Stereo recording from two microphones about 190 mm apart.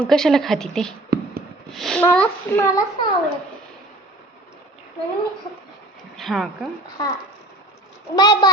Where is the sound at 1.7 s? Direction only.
Centre (ahead or behind).